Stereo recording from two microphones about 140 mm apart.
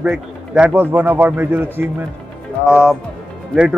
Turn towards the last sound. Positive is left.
turn(degrees=-5)  # may be behind; listen again after turning